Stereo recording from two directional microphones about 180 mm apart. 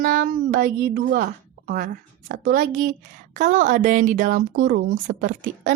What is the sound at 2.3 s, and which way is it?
Speech, 50° right (ahead or behind).